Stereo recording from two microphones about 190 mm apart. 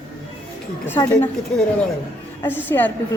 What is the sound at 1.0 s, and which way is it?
Speech, 10° left (ahead or behind).